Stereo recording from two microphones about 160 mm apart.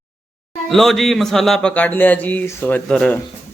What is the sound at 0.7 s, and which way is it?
Speech, centre (ahead or behind).